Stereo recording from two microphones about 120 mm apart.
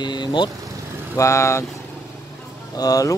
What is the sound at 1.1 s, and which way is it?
Speech, 25° left (ahead or behind).